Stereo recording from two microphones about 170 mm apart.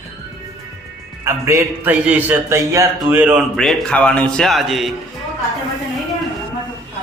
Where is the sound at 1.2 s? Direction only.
15° right (ahead or behind).